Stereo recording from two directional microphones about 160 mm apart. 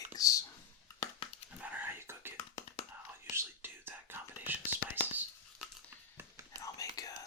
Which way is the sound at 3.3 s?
15° right (ahead or behind).